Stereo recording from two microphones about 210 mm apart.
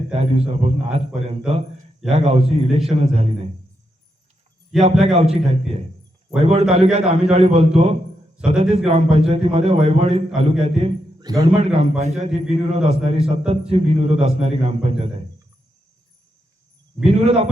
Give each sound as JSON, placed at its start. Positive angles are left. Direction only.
{"t": 0.1, "sound": "a man's voice", "side_deg": -30}
{"t": 4.8, "sound": "a man's voice", "side_deg": -30}
{"t": 17.0, "sound": "a man's voice", "side_deg": -30}